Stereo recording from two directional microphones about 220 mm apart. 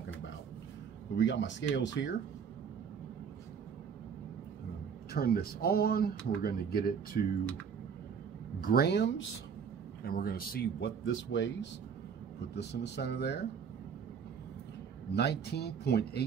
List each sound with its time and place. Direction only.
1.1 s speech: 55° left (ahead or behind)
5.1 s speech: 45° left (ahead or behind)
8.6 s speech: 45° left (ahead or behind)
11.1 s speech: 55° left (ahead or behind)
15.1 s speech: 50° left (ahead or behind)